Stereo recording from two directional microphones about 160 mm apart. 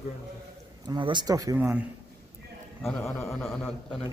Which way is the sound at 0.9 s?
30° right (ahead or behind).